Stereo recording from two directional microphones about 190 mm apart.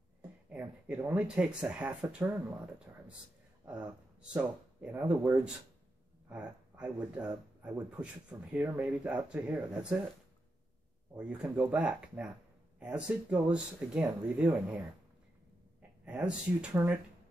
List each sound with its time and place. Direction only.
0.5 s speech: 5° right (ahead or behind)
2.9 s a sound: 15° right (ahead or behind)
4.2 s speech: 5° right (ahead or behind)
11.1 s speech: 5° right (ahead or behind)
16.1 s speech: 5° right (ahead or behind)